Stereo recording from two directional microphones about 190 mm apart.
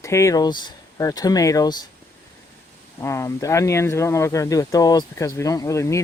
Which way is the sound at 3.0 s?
15° left (ahead or behind).